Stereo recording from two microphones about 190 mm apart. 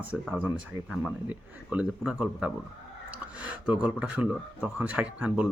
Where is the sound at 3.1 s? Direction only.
5° right (ahead or behind).